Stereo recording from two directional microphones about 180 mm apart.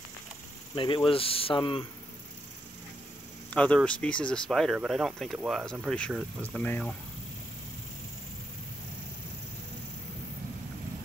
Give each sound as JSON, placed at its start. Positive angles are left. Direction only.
{"t": 0.7, "sound": "speech", "side_deg": 30}
{"t": 3.4, "sound": "speech", "side_deg": 5}